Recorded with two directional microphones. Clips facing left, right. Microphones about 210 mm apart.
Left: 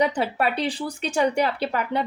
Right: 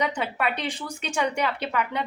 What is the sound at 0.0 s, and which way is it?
Speech, 35° left (ahead or behind).